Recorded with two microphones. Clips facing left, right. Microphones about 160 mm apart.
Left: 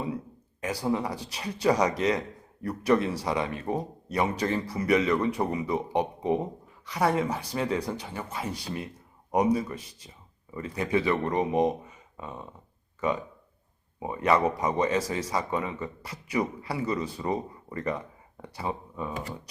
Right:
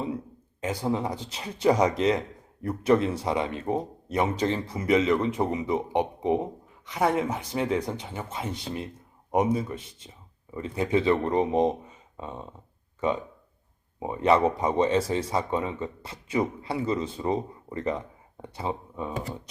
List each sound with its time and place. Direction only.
0.6 s speech: 20° right (ahead or behind)
12.1 s a sound: 25° right (ahead or behind)
14.0 s speech: 25° right (ahead or behind)